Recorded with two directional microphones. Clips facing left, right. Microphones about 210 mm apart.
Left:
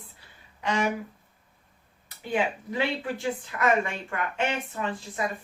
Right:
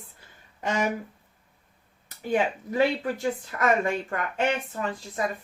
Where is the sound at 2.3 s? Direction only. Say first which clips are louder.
Right 3 dB; 45° right (ahead or behind).